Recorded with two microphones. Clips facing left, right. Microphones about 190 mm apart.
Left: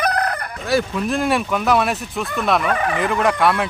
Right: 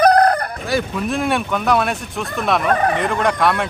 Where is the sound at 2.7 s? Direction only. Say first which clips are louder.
Right 4 dB; 40° right (ahead or behind).